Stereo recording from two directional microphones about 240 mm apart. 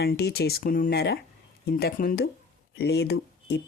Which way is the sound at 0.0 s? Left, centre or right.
Left.